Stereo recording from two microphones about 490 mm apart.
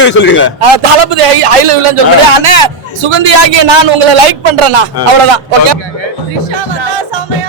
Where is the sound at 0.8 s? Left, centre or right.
Right.